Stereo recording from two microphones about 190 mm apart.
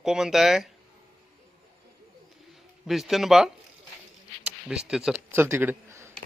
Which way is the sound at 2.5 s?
Centre (ahead or behind).